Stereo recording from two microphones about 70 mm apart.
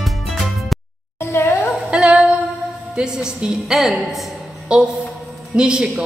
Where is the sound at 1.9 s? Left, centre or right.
Centre.